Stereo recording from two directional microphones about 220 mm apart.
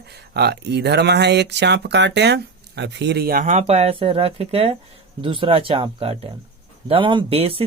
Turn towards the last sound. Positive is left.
turn(degrees=-25)  # may be behind; listen again after turning